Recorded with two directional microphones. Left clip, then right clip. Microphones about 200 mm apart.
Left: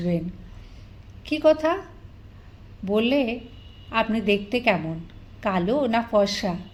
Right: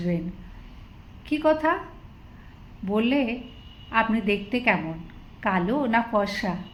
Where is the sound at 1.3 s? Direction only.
30° left (ahead or behind).